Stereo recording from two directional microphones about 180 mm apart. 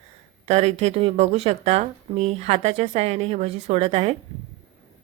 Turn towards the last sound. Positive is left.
turn(degrees=-35)  # may be behind; listen again after turning